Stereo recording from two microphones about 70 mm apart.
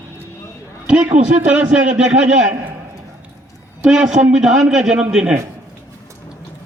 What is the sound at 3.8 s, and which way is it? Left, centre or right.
A man's voice, centre.